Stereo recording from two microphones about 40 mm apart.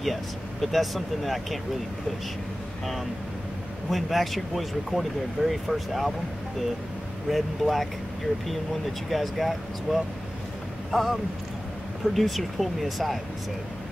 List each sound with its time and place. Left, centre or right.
0.0 s speech: centre
3.9 s speech: centre
7.2 s speech: centre
9.1 s speech: centre